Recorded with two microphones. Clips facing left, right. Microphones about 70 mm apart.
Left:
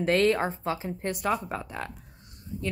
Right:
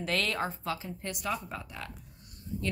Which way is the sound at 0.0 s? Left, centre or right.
Left.